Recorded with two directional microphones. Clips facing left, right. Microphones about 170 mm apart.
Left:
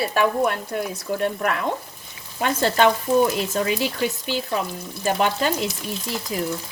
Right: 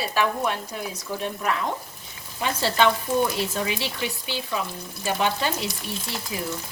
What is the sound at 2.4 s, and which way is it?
Speech, 50° left (ahead or behind).